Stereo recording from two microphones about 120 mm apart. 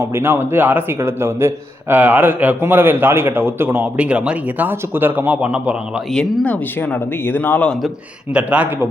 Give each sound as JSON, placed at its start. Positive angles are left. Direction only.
{"t": 0.0, "sound": "a man's voice", "side_deg": -20}
{"t": 4.0, "sound": "a man's voice", "side_deg": -10}
{"t": 6.1, "sound": "speech", "side_deg": 10}
{"t": 8.3, "sound": "a man's voice", "side_deg": -10}